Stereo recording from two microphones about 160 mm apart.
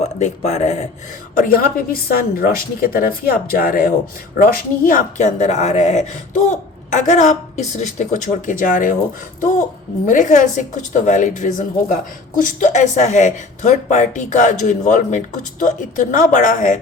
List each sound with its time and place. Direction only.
0.0 s a woman's voice: 45° left (ahead or behind)
1.4 s a woman's voice: 65° left (ahead or behind)
10.1 s a woman's voice: 50° left (ahead or behind)